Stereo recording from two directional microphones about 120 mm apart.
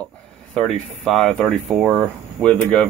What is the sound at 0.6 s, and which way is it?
Speech, 5° left (ahead or behind).